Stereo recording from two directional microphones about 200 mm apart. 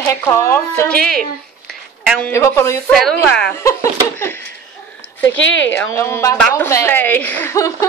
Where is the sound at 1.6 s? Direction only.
Centre (ahead or behind).